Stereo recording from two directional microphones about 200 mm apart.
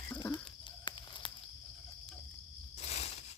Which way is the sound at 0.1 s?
20° left (ahead or behind).